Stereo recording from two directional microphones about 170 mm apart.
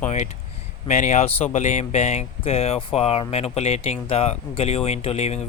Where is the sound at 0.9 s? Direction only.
45° left (ahead or behind).